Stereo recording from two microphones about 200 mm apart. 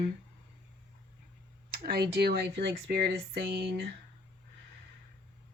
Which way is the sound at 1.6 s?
50° right (ahead or behind).